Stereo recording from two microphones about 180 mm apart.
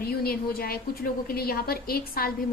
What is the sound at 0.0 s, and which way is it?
A woman's voice, 60° left (ahead or behind).